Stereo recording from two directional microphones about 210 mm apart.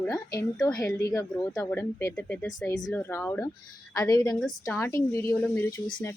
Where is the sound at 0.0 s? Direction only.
15° left (ahead or behind).